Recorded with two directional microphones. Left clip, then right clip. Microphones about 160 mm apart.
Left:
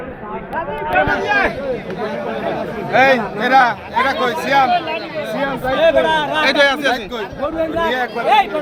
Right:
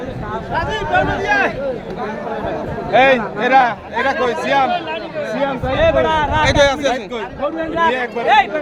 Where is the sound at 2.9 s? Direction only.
25° right (ahead or behind).